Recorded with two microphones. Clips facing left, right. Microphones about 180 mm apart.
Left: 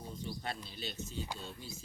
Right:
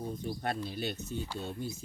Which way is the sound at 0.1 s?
55° right (ahead or behind).